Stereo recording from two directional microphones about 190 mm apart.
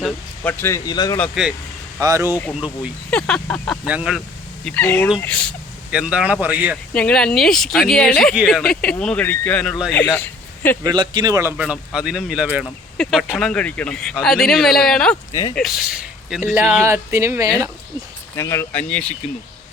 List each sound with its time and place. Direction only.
0.0 s speech: 10° left (ahead or behind)
2.0 s a man's voice: 15° right (ahead or behind)
3.1 s speech: 5° left (ahead or behind)
4.6 s speech: 10° left (ahead or behind)
5.9 s a man's voice: 5° right (ahead or behind)
6.9 s speech: 5° left (ahead or behind)
10.2 s a sound: 10° left (ahead or behind)
10.8 s speech: 25° right (ahead or behind)
11.5 s speech: 5° right (ahead or behind)
15.3 s speech: 20° left (ahead or behind)
15.5 s speech: centre (ahead or behind)
16.4 s a man's voice: 15° right (ahead or behind)
18.3 s speech: 15° left (ahead or behind)